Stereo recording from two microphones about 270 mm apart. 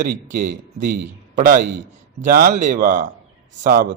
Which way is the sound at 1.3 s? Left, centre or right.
Right.